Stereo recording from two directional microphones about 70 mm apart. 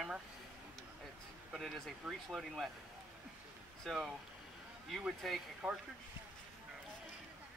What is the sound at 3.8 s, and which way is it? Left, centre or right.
Speech, centre.